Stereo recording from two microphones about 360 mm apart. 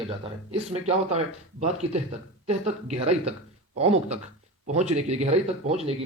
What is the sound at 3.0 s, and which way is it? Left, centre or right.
Speech, centre.